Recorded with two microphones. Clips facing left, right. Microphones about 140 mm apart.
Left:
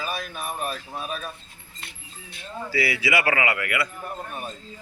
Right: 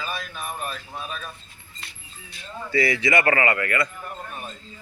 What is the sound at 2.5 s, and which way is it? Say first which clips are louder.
Speech: right 3 dB; 10° left (ahead or behind).